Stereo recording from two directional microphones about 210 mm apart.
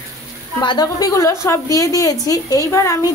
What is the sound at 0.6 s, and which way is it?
A woman's voice, 20° left (ahead or behind).